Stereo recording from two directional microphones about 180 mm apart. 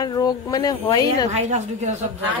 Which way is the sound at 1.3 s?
40° right (ahead or behind).